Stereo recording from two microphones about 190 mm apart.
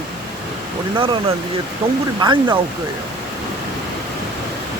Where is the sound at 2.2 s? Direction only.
25° right (ahead or behind).